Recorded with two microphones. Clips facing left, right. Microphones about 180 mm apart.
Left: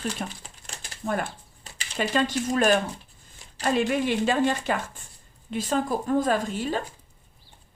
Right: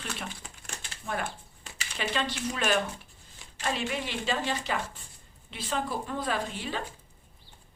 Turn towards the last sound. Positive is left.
turn(degrees=45)  # may be behind; listen again after turning